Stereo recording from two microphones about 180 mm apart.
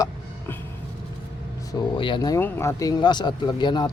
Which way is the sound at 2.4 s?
10° left (ahead or behind).